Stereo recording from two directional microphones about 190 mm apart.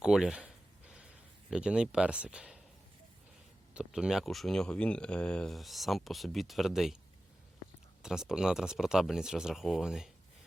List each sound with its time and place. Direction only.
0.0 s a sound: 5° right (ahead or behind)
1.5 s speech: 5° right (ahead or behind)
3.8 s speech: 5° right (ahead or behind)
8.0 s speech: 5° right (ahead or behind)